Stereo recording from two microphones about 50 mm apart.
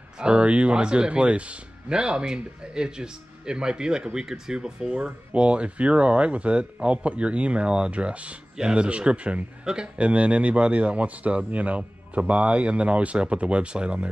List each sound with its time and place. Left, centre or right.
0.2 s speech: right